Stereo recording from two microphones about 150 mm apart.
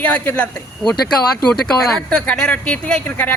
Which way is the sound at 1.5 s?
5° left (ahead or behind).